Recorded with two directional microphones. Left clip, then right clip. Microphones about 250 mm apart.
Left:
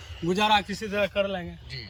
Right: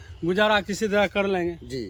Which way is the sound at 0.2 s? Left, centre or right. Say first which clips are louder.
Right 2 dB; centre.